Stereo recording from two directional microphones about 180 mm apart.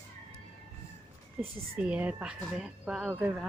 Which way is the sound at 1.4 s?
5° right (ahead or behind).